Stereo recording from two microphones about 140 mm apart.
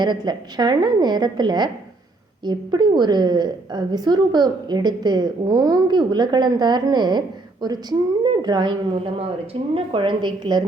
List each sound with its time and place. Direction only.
0.0 s a woman's voice: 30° right (ahead or behind)